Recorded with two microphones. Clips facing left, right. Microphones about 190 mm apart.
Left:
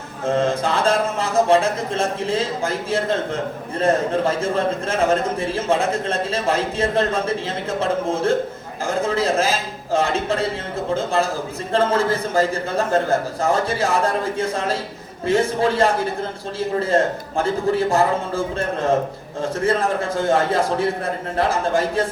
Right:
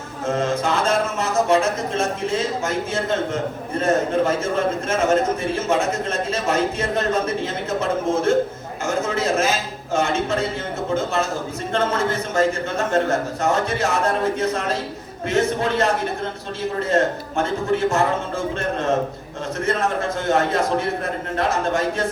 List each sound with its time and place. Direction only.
0.3 s a man's voice: 30° left (ahead or behind)
16.9 s a man's voice: 30° left (ahead or behind)
20.1 s a man's voice: 30° left (ahead or behind)